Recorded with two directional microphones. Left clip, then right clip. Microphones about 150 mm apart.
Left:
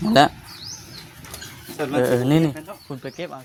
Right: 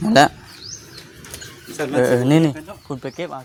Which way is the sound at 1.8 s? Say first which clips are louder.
Right 3 dB; 20° right (ahead or behind).